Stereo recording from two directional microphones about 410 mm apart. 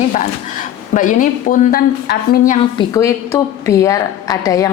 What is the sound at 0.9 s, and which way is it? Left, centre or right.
A woman's voice, centre.